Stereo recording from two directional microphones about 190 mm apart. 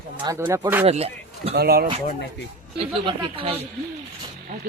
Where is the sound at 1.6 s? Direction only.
55° right (ahead or behind).